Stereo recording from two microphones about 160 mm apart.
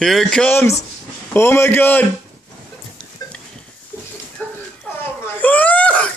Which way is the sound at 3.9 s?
15° left (ahead or behind).